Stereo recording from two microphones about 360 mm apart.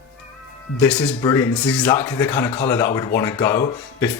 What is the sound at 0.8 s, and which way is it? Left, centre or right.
Speech, centre.